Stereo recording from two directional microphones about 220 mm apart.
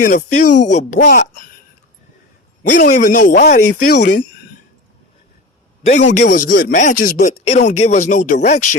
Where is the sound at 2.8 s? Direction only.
35° left (ahead or behind).